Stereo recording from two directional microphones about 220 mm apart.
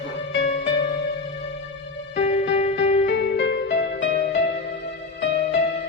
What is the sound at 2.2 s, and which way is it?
Music, 30° left (ahead or behind).